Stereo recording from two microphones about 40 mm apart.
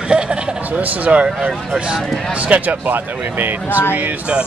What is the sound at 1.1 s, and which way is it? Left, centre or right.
Speech, right.